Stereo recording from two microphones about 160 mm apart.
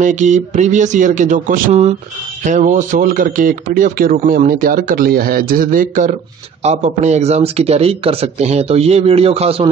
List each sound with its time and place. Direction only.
0.0 s speech: 50° right (ahead or behind)
6.6 s speech: 45° right (ahead or behind)